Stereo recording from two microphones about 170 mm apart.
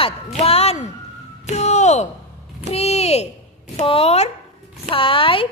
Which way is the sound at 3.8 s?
35° left (ahead or behind).